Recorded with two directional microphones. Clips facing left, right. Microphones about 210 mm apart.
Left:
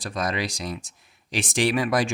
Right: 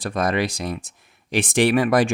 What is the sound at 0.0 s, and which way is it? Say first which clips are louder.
Speech: right 6 dB; 55° right (ahead or behind).